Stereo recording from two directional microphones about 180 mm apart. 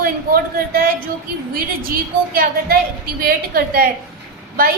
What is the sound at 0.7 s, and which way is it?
A woman's voice, 55° right (ahead or behind).